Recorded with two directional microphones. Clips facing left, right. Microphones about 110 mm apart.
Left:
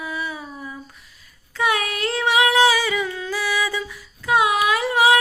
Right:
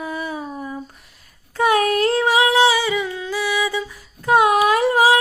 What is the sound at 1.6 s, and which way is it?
Humming, 40° right (ahead or behind).